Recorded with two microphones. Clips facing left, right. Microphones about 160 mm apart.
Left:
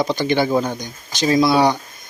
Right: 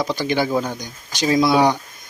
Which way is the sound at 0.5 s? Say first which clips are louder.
Left 3 dB; 20° left (ahead or behind).